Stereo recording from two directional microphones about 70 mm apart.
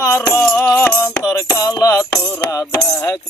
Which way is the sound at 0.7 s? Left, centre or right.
Left.